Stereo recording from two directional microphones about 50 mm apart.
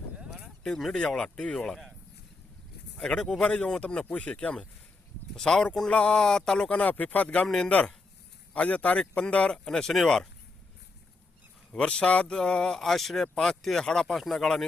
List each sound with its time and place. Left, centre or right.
0.2 s a sound: centre
0.6 s speech: centre
1.0 s speech: centre
3.0 s speech: centre
6.7 s speech: left
7.4 s speech: centre
8.5 s speech: left; by 10.2 s centre
11.7 s speech: left
14.2 s speech: centre